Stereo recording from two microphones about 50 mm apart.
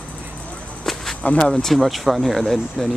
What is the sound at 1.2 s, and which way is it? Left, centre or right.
Speech, left.